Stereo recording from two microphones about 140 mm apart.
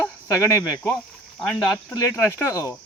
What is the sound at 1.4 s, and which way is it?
Speech, 5° left (ahead or behind).